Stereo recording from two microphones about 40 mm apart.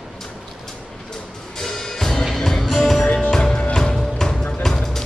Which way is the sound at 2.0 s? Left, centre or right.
Centre.